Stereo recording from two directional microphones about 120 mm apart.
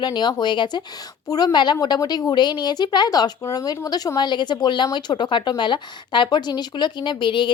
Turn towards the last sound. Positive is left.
turn(degrees=45)  # may be behind; listen again after turning